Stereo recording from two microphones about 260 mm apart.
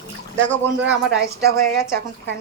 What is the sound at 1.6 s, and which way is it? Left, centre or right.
Speech, centre.